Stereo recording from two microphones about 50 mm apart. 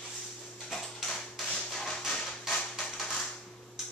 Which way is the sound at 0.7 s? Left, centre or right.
Centre.